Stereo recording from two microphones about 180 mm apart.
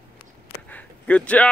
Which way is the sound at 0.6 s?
10° left (ahead or behind).